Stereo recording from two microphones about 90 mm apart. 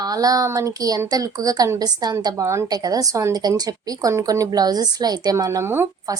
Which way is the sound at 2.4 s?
30° right (ahead or behind).